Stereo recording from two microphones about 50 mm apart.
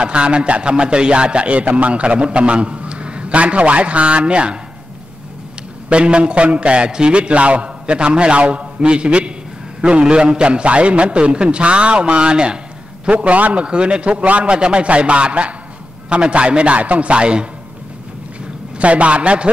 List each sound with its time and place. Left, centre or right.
0.0 s speech: right
5.9 s speech: right
18.8 s speech: right